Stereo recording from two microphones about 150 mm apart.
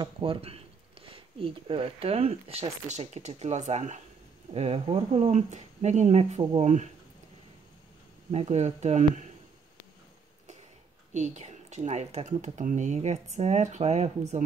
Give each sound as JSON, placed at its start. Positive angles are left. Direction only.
{"t": 0.0, "sound": "speech", "side_deg": -35}
{"t": 8.3, "sound": "speech", "side_deg": -45}
{"t": 11.1, "sound": "speech", "side_deg": -50}